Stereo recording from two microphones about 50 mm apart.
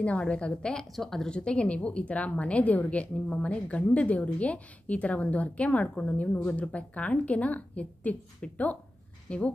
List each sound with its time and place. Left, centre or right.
0.0 s a woman's voice: left
0.9 s a woman's voice: centre
1.3 s a woman's voice: left